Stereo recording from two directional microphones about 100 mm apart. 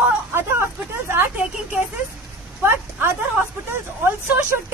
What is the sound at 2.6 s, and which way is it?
Speech, 25° right (ahead or behind).